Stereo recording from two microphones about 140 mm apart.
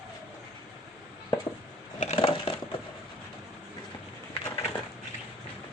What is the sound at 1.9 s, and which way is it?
Crushing, 45° left (ahead or behind).